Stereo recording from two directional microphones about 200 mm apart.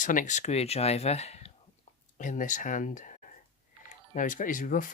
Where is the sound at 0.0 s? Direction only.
40° left (ahead or behind).